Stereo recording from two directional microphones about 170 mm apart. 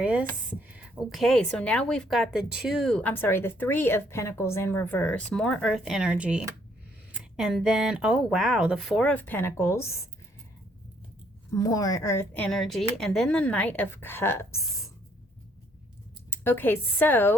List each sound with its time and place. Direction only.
0.0 s speech: 5° right (ahead or behind); by 9.8 s 15° left (ahead or behind)
11.5 s speech: 20° left (ahead or behind)
16.3 s speech: 10° left (ahead or behind)